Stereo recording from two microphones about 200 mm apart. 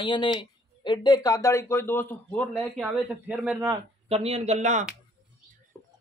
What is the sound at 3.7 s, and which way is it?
Speech, 30° right (ahead or behind).